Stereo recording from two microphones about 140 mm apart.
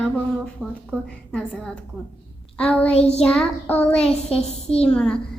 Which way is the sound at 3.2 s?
5° left (ahead or behind).